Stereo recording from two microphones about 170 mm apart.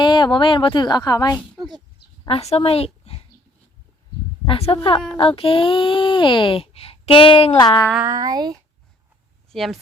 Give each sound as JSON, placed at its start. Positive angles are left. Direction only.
{"t": 0.0, "sound": "a woman's voice", "side_deg": 25}
{"t": 2.2, "sound": "a woman's voice", "side_deg": 35}
{"t": 4.4, "sound": "speech", "side_deg": 35}
{"t": 8.0, "sound": "speech", "side_deg": -20}
{"t": 9.5, "sound": "speech", "side_deg": 0}